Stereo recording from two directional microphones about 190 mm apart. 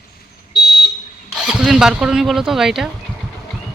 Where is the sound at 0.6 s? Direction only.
55° left (ahead or behind).